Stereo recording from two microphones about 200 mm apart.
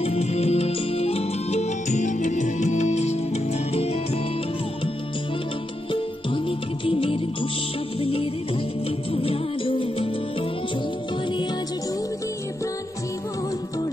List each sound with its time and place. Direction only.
0.0 s music: 30° left (ahead or behind)
6.9 s music: 30° left (ahead or behind)